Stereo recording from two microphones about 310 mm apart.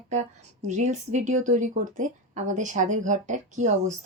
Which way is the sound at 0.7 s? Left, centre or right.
Right.